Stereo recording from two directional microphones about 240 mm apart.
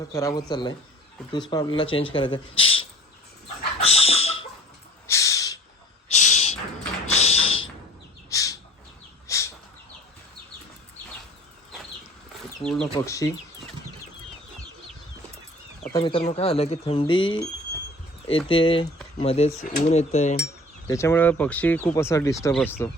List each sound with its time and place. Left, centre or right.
0.1 s speech: centre
3.8 s dog: left
5.0 s a sound: centre
6.1 s a sound: left
8.3 s bird: centre
9.2 s a sound: centre
12.6 s speech: centre
15.9 s speech: centre
20.8 s speech: centre